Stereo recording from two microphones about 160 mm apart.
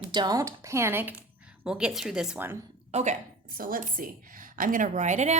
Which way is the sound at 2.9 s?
50° right (ahead or behind).